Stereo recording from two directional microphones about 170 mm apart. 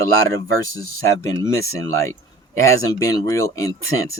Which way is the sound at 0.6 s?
20° left (ahead or behind).